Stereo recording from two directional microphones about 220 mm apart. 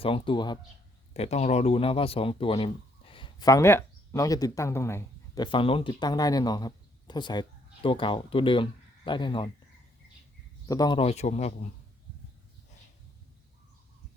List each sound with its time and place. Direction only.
0.0 s speech: 25° left (ahead or behind)
10.7 s speech: 20° left (ahead or behind)